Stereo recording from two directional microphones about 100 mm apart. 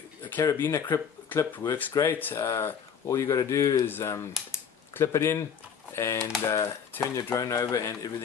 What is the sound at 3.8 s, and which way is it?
A man's voice, 20° left (ahead or behind).